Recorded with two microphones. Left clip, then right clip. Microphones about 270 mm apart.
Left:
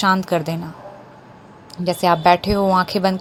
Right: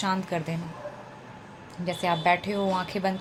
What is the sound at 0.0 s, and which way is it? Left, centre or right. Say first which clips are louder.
Speech: left 11 dB; left.